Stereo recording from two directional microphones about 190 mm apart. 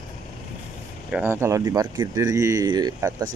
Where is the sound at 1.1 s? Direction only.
10° right (ahead or behind).